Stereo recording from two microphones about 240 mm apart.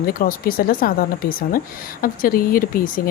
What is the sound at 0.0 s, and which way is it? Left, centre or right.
Speech, left.